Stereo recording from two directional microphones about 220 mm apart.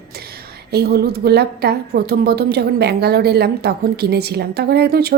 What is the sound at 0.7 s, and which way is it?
A woman's voice, 45° right (ahead or behind).